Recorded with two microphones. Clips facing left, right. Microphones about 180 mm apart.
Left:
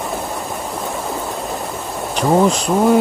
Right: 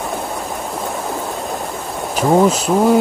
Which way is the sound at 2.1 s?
5° right (ahead or behind).